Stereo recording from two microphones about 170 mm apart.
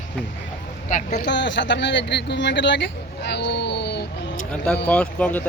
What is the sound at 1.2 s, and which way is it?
Speech, 90° left.